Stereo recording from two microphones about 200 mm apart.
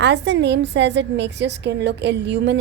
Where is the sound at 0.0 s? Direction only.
60° right (ahead or behind).